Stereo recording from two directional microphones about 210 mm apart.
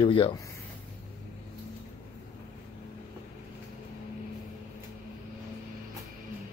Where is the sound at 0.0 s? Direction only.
25° left (ahead or behind).